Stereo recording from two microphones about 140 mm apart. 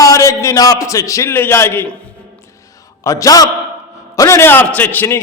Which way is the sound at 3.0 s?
25° left (ahead or behind).